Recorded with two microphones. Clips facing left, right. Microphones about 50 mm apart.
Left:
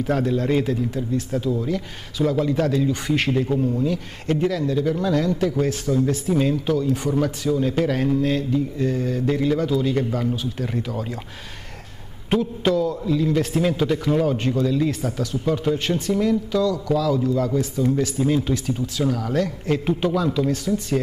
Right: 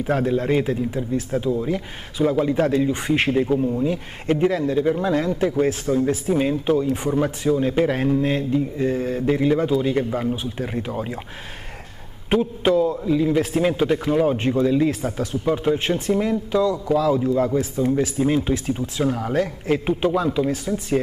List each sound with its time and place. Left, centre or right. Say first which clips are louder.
0.0 s speech: right 1 dB; centre
12.3 s speech: right 2 dB; right